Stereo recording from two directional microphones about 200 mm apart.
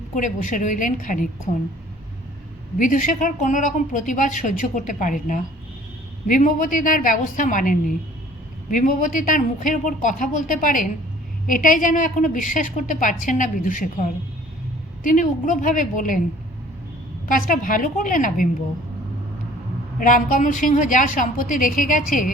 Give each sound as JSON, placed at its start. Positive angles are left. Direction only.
{"t": 0.2, "sound": "speech", "side_deg": 40}
{"t": 2.7, "sound": "speech", "side_deg": 40}
{"t": 15.0, "sound": "speech", "side_deg": 40}
{"t": 17.2, "sound": "a woman's voice", "side_deg": 45}
{"t": 20.0, "sound": "speech", "side_deg": 45}